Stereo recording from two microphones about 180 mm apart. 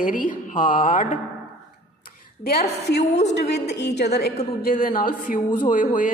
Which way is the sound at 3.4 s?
70° left (ahead or behind).